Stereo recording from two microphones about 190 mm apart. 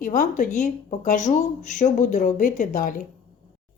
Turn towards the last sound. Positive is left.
turn(degrees=45)  # may be behind; listen again after turning